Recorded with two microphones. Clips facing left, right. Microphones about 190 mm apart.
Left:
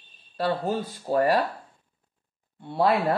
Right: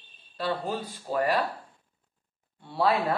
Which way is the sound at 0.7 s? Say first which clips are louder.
Left 5 dB; 50° left (ahead or behind).